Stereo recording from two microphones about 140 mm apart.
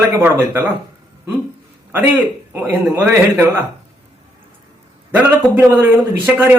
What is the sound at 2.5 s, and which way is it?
Speech, 15° right (ahead or behind).